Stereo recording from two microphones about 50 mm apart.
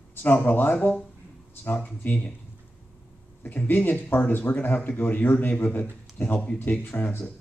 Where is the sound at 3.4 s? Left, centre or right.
Left.